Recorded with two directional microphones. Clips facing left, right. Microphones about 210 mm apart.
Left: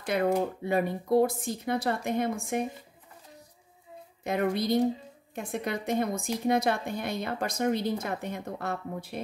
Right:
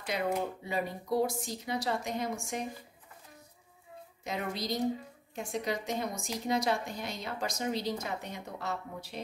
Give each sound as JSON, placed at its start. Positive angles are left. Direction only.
{"t": 0.0, "sound": "a woman's voice", "side_deg": 55}
{"t": 4.2, "sound": "a woman's voice", "side_deg": 55}